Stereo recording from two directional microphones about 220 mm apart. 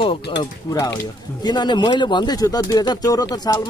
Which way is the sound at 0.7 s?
15° left (ahead or behind).